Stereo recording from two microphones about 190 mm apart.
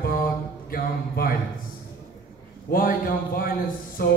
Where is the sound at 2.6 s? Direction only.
50° left (ahead or behind).